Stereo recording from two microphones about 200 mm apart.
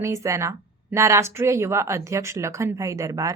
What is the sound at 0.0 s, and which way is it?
Speech, 15° right (ahead or behind).